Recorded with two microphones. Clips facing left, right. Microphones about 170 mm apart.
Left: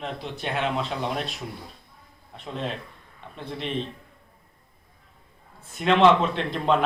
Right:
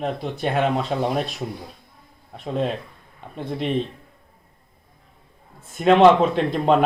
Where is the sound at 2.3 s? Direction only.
45° right (ahead or behind).